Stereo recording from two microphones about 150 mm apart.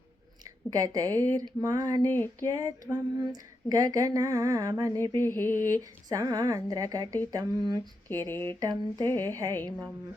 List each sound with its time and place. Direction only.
0.8 s speech: 25° right (ahead or behind)
2.0 s mantra: 15° left (ahead or behind)
2.4 s speech: 25° right (ahead or behind)
5.1 s mantra: 15° left (ahead or behind)
6.1 s speech: 25° right (ahead or behind)
8.0 s mantra: 15° left (ahead or behind)
8.6 s speech: 25° right (ahead or behind)
9.1 s mantra: 15° left (ahead or behind)